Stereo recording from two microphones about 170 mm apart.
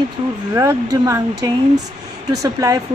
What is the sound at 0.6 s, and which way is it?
Speech, 20° right (ahead or behind).